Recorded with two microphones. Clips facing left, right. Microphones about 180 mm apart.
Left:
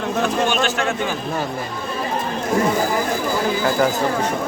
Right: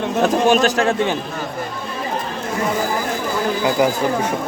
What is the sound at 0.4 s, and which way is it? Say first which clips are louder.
Speech: right 5 dB; 40° right (ahead or behind).